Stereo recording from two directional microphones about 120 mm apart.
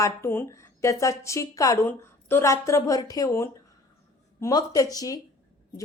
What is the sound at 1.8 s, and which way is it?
A woman's voice, 15° left (ahead or behind).